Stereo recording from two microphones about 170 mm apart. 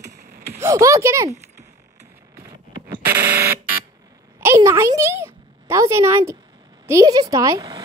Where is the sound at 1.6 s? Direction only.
20° right (ahead or behind).